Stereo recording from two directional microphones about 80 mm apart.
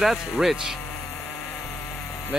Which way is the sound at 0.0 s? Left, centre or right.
Centre.